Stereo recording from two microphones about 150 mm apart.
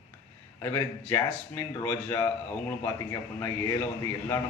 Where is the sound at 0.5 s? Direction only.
20° left (ahead or behind).